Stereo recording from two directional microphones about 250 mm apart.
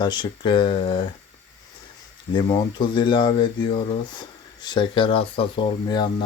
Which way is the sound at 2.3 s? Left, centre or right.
Centre.